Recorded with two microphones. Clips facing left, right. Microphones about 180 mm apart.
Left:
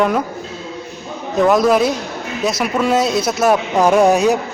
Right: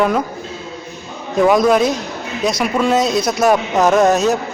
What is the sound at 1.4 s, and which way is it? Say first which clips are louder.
Speech: right 1 dB; centre (ahead or behind).